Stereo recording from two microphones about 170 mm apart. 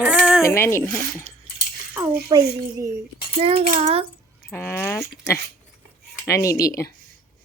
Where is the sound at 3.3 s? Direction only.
35° right (ahead or behind).